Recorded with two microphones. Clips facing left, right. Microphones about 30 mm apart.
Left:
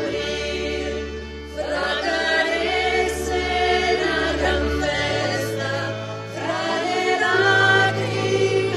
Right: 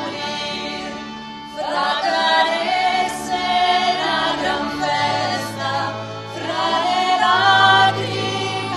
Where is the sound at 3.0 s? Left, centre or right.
Centre.